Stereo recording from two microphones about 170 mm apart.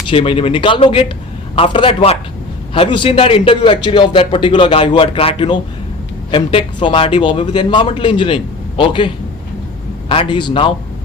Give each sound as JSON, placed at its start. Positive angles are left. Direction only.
{"t": 0.1, "sound": "a man's voice", "side_deg": 30}